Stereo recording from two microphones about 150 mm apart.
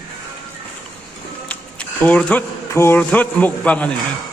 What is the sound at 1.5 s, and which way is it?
Speech, 10° left (ahead or behind).